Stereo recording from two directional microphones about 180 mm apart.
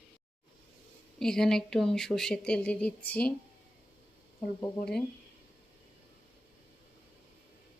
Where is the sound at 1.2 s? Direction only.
5° left (ahead or behind).